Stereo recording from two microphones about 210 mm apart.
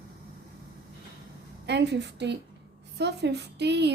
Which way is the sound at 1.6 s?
55° right (ahead or behind).